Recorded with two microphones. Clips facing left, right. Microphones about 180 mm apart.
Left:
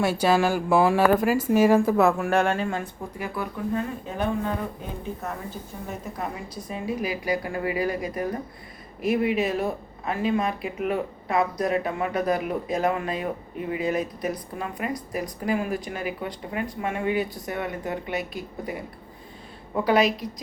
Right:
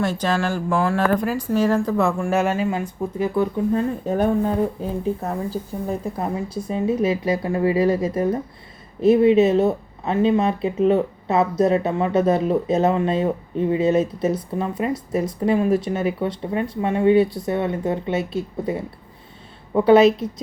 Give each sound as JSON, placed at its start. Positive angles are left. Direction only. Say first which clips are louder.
{"t": 0.0, "sound": "a woman's voice", "louder": "left 1 dB", "side_deg": 10}
{"t": 3.2, "sound": "speech", "louder": "right 10 dB", "side_deg": -25}
{"t": 4.0, "sound": "speech", "louder": "right 7 dB", "side_deg": -40}